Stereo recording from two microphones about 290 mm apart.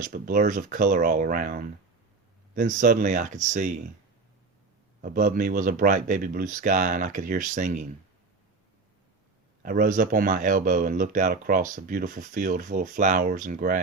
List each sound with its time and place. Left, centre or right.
0.0 s speech: right
5.0 s speech: right
9.6 s speech: right